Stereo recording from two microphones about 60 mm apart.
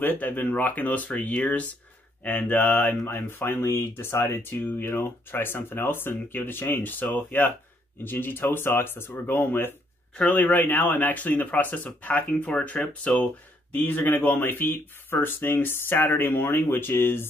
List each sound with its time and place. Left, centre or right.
0.0 s speech: left